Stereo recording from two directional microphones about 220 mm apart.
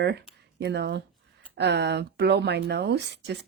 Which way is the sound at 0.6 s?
50° right (ahead or behind).